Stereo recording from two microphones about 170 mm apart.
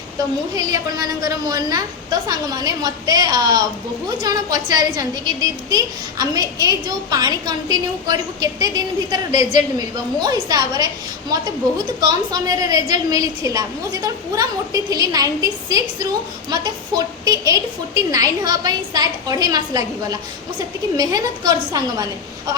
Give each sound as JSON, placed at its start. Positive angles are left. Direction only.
{"t": 0.5, "sound": "a woman's voice", "side_deg": -20}
{"t": 11.9, "sound": "a woman's voice", "side_deg": -25}